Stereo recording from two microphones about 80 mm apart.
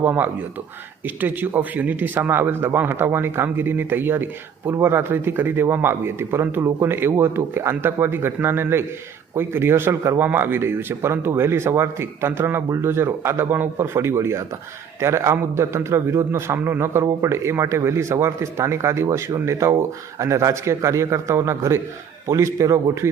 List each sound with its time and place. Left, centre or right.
0.0 s a man's voice: right